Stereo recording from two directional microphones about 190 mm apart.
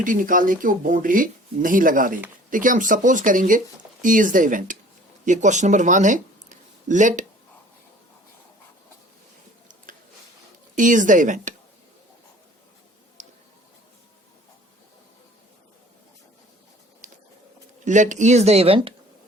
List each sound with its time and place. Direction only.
0.0 s speech: 45° right (ahead or behind)
10.8 s speech: 45° right (ahead or behind)
17.0 s a sound: 40° right (ahead or behind)
17.8 s speech: 40° right (ahead or behind)